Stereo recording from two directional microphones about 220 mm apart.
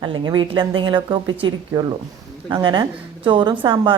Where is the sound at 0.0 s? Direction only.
20° right (ahead or behind).